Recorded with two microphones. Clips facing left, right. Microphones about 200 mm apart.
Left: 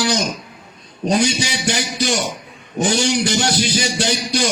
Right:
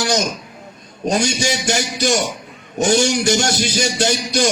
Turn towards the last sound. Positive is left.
turn(degrees=-45)  # may be behind; listen again after turning